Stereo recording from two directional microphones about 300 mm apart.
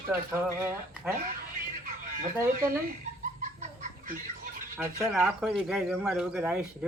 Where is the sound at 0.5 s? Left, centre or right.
Centre.